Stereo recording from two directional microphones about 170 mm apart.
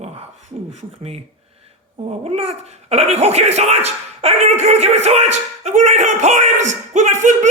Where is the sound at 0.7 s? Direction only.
40° right (ahead or behind).